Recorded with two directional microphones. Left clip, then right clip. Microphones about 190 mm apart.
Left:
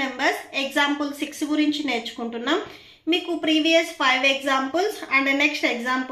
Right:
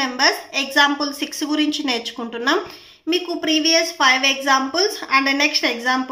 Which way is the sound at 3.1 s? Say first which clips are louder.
Right 2 dB; 20° right (ahead or behind).